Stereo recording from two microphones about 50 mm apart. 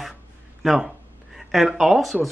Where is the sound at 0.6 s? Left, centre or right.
Centre.